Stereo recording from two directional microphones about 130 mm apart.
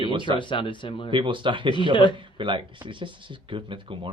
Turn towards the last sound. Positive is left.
turn(degrees=-40)  # may be behind; listen again after turning